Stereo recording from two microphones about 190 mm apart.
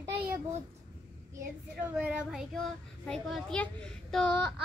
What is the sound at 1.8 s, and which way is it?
A child's voice, 5° right (ahead or behind).